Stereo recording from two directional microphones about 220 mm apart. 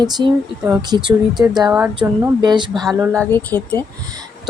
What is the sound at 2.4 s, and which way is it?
Speech, 20° right (ahead or behind).